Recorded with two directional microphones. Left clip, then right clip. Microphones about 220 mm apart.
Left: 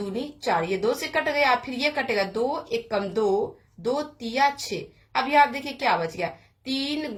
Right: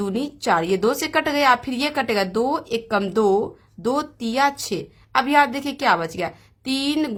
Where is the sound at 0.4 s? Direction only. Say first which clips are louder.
Right 5 dB; 35° right (ahead or behind).